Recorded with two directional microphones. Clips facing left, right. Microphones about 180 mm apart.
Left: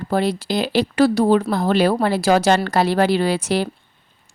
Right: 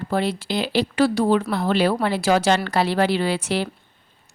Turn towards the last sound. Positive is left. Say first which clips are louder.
# left 3 dB
turn(degrees=40)  # may be behind; listen again after turning